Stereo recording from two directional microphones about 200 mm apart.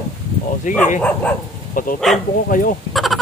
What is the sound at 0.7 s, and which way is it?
Speech, 40° left (ahead or behind).